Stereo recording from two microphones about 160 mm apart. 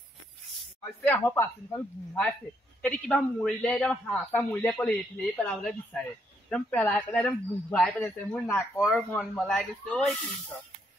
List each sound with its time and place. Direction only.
1.0 s a man's voice: 15° left (ahead or behind)
2.8 s a man's voice: 5° left (ahead or behind)
8.5 s a man's voice: 15° left (ahead or behind)
8.9 s speech: centre (ahead or behind)